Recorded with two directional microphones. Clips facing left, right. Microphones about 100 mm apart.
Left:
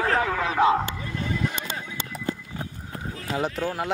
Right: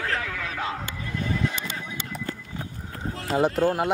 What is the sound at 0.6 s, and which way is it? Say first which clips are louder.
Speech: left 14 dB; 60° left (ahead or behind).